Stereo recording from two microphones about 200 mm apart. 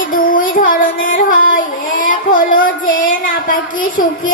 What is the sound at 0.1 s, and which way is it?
Child singing, 45° left (ahead or behind).